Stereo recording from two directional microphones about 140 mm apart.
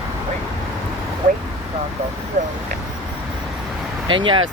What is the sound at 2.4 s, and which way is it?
Speech, 65° right (ahead or behind).